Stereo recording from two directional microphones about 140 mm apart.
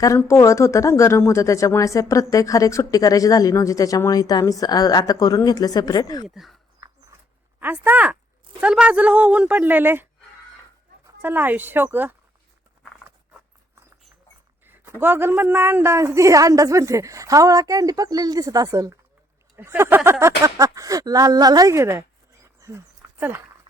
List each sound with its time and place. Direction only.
0.2 s speech: 20° left (ahead or behind)
6.2 s speech: centre (ahead or behind)
6.7 s a sound: 25° right (ahead or behind)
7.6 s a woman's voice: 15° right (ahead or behind)
11.2 s a woman's voice: 15° right (ahead or behind)
14.6 s a woman's voice: 15° right (ahead or behind)
22.6 s a sound: 15° right (ahead or behind)